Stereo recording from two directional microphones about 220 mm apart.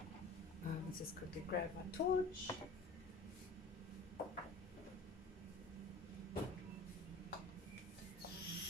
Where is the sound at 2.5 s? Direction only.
15° left (ahead or behind).